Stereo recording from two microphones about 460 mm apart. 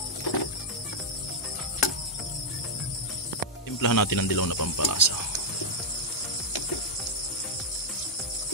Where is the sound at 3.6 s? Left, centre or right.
Left.